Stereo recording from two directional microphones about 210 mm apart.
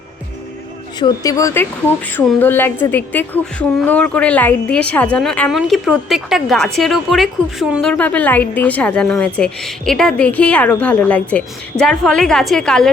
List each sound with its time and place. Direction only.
0.9 s a woman's voice: 20° left (ahead or behind); by 12.9 s 5° left (ahead or behind)